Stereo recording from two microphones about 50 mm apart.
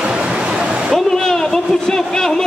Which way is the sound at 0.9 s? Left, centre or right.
Centre.